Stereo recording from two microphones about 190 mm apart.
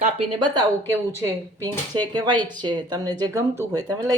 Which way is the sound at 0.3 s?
25° right (ahead or behind).